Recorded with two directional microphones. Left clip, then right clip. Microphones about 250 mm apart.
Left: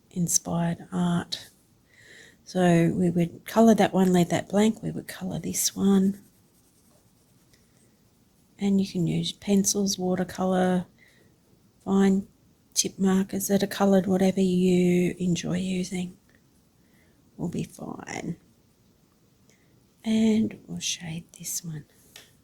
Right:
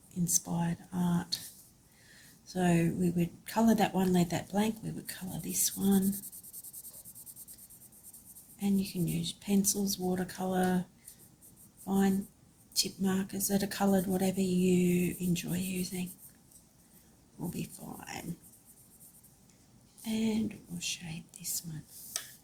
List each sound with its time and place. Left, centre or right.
0.1 s speech: left
2.5 s speech: left
8.5 s speech: left
11.9 s speech: left
17.5 s speech: left
20.1 s speech: left